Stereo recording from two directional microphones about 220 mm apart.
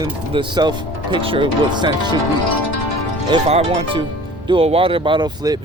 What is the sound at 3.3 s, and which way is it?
Speech, 30° right (ahead or behind).